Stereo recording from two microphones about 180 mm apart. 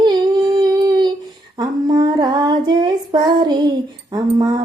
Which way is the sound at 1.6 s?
25° right (ahead or behind).